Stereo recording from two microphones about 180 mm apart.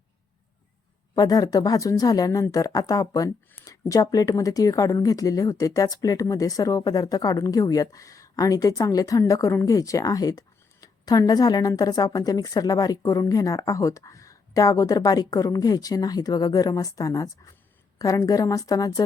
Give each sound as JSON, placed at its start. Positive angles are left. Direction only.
{"t": 1.1, "sound": "a woman's voice", "side_deg": 20}